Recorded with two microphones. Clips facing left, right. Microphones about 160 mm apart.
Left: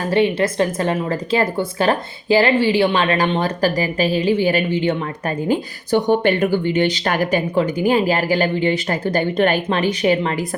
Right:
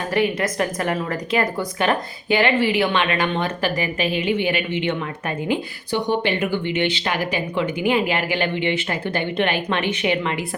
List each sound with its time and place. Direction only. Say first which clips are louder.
0.1 s a woman's voice: left 4 dB; 30° left (ahead or behind)
5.5 s a woman's voice: left 6 dB; 45° left (ahead or behind)